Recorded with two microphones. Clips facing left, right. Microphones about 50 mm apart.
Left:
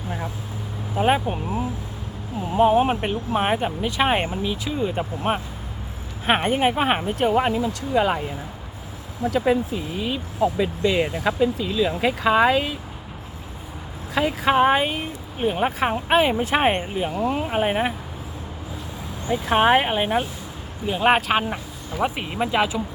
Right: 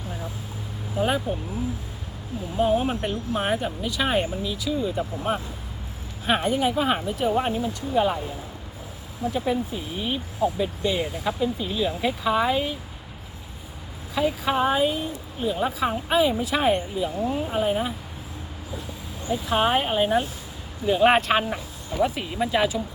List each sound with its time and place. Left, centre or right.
0.9 s speech: left
9.3 s speech: left
14.1 s speech: left
17.2 s speech: left
17.5 s speech: left
19.3 s speech: left
20.8 s speech: centre
21.9 s speech: left